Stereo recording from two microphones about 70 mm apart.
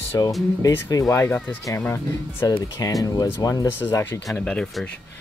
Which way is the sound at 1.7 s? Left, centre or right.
Left.